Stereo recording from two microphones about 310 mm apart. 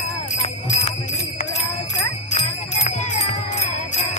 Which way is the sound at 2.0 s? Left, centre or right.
Left.